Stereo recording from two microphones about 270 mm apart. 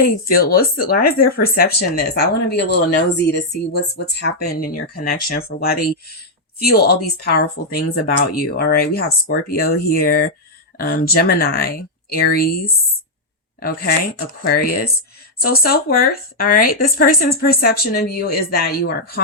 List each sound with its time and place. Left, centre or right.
0.0 s speech: left
15.4 s speech: left